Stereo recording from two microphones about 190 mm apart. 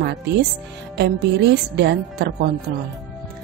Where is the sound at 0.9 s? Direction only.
60° right (ahead or behind).